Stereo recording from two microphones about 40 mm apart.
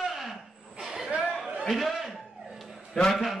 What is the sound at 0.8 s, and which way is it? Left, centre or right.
Chuckle, centre.